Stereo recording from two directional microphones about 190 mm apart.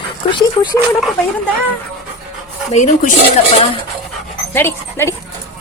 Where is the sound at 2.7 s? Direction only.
40° left (ahead or behind).